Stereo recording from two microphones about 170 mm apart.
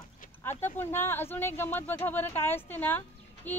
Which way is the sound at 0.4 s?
15° left (ahead or behind).